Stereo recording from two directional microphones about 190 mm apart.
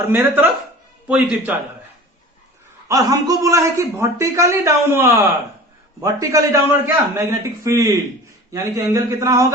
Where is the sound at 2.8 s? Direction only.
20° right (ahead or behind).